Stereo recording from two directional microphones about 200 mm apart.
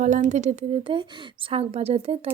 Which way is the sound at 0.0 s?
35° right (ahead or behind).